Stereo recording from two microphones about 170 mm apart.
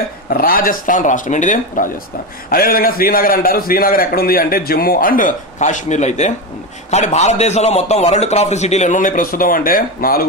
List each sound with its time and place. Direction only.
0.3 s speech: 60° left (ahead or behind)
2.5 s a man's voice: 60° left (ahead or behind)